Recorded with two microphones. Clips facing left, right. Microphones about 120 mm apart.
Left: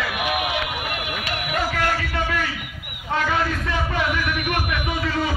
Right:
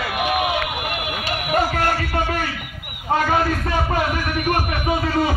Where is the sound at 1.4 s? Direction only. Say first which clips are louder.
Right 4 dB; 40° right (ahead or behind).